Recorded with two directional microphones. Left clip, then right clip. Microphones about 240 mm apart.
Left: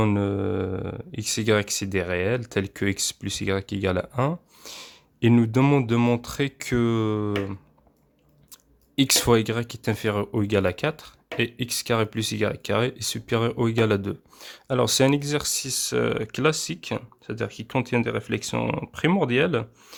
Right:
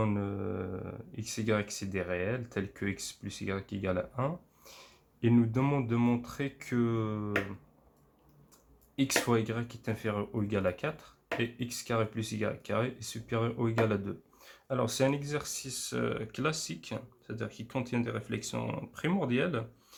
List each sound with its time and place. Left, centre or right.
0.0 s speech: left
9.0 s speech: left